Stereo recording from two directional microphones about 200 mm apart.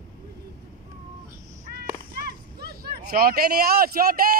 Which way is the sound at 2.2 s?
55° right (ahead or behind).